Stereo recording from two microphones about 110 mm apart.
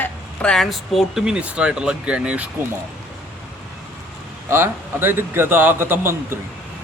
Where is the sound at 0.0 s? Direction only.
5° left (ahead or behind); by 2.5 s 10° right (ahead or behind).